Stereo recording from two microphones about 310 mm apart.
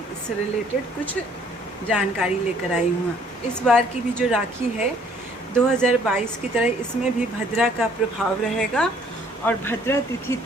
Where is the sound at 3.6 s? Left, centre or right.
Centre.